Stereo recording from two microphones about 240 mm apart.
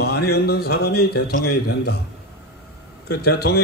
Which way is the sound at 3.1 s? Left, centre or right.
Left.